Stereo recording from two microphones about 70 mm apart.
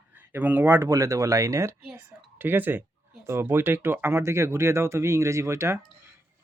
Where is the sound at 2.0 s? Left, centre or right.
Right.